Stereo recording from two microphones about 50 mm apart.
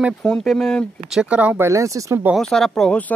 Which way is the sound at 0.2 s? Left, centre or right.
Centre.